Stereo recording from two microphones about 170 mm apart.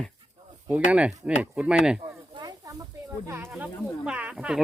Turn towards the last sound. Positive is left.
turn(degrees=-5)  # may be behind; listen again after turning